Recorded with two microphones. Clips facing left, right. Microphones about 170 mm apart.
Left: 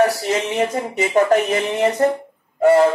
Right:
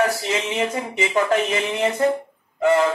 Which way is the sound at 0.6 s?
45° left (ahead or behind).